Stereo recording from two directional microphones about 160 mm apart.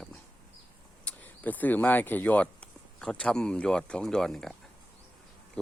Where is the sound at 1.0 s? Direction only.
10° left (ahead or behind).